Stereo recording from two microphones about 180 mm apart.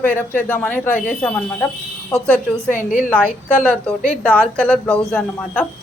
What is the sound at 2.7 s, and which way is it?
Speech, 45° left (ahead or behind).